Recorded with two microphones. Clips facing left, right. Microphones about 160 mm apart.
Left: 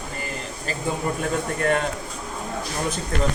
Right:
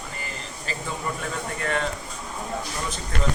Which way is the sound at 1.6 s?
45° left (ahead or behind).